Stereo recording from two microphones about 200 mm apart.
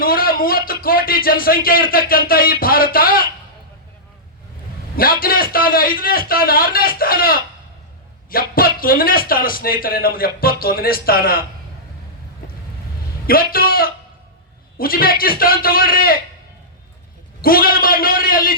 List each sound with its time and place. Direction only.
0.0 s speech: 45° left (ahead or behind)
4.9 s speech: 45° left (ahead or behind)
13.2 s speech: 45° left (ahead or behind)
17.4 s speech: 45° left (ahead or behind)